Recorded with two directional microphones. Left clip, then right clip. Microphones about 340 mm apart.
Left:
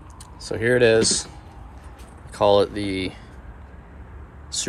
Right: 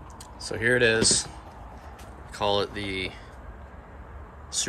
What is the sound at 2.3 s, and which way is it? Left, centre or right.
Speech, centre.